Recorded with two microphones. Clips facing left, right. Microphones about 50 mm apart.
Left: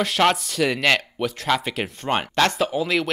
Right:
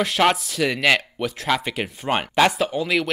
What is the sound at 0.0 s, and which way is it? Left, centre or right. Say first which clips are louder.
Speech: even; centre.